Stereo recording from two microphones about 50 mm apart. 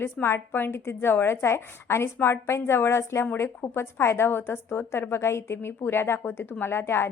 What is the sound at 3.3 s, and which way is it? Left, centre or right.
A woman's voice, left.